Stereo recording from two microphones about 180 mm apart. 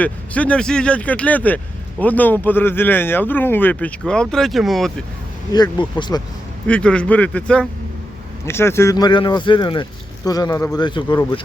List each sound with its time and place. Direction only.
0.0 s speech: 5° left (ahead or behind)
6.0 s speech: 20° left (ahead or behind)
6.7 s speech: 5° left (ahead or behind); by 11.2 s 25° left (ahead or behind)